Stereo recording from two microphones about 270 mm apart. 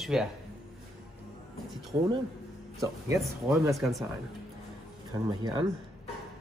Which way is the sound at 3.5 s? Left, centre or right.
Centre.